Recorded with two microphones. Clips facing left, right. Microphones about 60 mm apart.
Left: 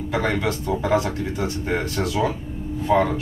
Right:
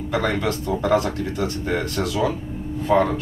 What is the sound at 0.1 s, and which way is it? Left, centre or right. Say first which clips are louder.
Speech: right 1 dB; centre.